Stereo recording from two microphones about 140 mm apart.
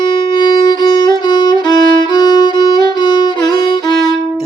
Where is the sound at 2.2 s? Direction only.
30° left (ahead or behind).